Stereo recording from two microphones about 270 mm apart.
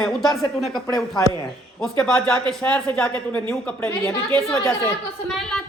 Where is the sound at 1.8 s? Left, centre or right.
Centre.